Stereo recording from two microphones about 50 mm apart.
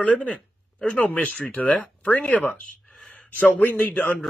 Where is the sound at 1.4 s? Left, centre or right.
Left.